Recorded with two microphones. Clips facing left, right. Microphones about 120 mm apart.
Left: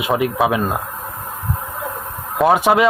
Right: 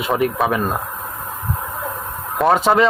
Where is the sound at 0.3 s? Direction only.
10° left (ahead or behind).